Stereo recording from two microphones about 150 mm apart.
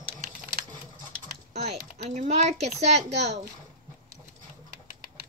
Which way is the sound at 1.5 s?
45° right (ahead or behind).